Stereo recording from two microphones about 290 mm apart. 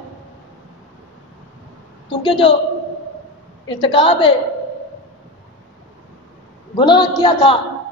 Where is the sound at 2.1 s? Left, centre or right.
Centre.